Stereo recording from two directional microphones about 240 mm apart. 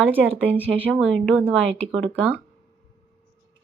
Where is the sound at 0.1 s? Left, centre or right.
Centre.